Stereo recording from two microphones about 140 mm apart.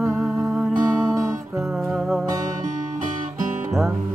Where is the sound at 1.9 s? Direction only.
Centre (ahead or behind).